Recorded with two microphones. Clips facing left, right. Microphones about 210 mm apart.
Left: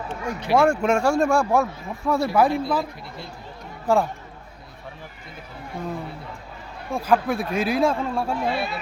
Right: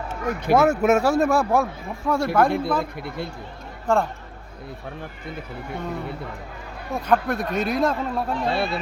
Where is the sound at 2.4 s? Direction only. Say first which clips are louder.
Even; 55° right (ahead or behind).